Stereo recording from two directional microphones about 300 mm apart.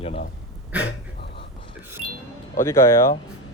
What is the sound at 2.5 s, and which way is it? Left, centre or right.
Speech, centre.